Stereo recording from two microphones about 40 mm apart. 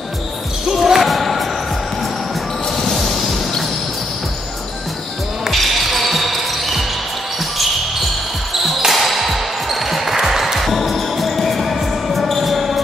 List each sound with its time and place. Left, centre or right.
0.7 s basketball bounce: centre
2.8 s music: centre
5.5 s basketball bounce: centre
8.5 s basketball bounce: centre